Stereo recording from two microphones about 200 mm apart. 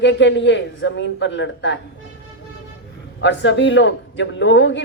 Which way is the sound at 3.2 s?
65° left (ahead or behind).